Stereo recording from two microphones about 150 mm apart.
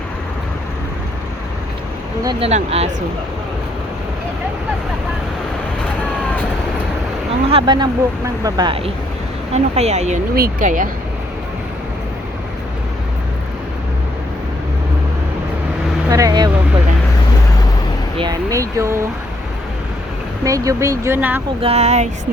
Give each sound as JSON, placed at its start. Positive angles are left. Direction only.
{"t": 2.4, "sound": "speech", "side_deg": -40}
{"t": 7.5, "sound": "speech", "side_deg": -30}
{"t": 9.5, "sound": "speech", "side_deg": -45}
{"t": 10.3, "sound": "speech", "side_deg": -70}
{"t": 16.0, "sound": "speech", "side_deg": -20}
{"t": 18.2, "sound": "speech", "side_deg": -25}
{"t": 20.4, "sound": "speech", "side_deg": -20}
{"t": 21.6, "sound": "speech", "side_deg": -45}